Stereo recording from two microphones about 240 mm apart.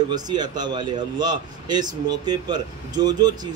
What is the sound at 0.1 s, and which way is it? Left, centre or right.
A man's voice, centre.